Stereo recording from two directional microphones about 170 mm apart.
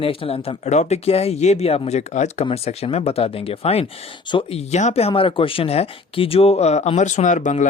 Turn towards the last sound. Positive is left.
turn(degrees=45)  # may be behind; listen again after turning